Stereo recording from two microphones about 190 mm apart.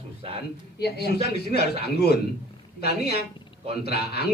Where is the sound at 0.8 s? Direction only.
55° left (ahead or behind).